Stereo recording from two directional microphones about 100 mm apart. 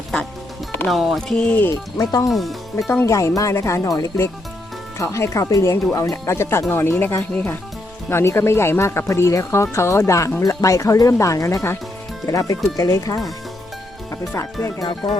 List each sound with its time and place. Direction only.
0.9 s speech: centre (ahead or behind)
2.0 s speech: 35° left (ahead or behind)
2.3 s speech: centre (ahead or behind)
3.1 s speech: 30° left (ahead or behind)
14.8 s speech: 55° left (ahead or behind)